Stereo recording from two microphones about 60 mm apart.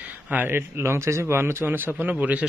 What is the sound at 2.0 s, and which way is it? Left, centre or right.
Speech, right.